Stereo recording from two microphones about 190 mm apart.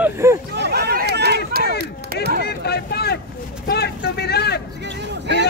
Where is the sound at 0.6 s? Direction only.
60° right (ahead or behind).